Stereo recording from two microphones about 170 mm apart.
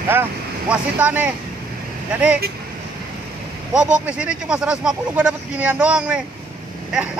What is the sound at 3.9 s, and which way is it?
Speech, 5° right (ahead or behind).